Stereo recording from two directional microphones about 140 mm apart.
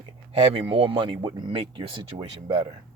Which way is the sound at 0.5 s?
40° right (ahead or behind).